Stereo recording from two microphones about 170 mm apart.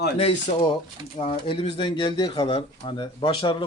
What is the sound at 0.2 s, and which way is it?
A man's voice, 35° left (ahead or behind).